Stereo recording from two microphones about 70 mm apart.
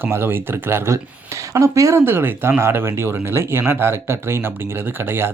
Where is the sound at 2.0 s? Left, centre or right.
Right.